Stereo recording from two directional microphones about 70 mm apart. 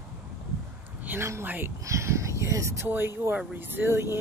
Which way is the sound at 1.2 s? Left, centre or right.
Right.